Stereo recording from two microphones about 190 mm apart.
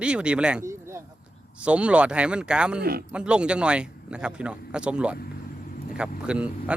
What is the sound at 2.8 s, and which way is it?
Speech, 55° right (ahead or behind).